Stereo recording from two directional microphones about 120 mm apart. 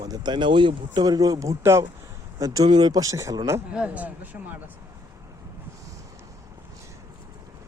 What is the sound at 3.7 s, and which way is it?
Speech, 10° right (ahead or behind).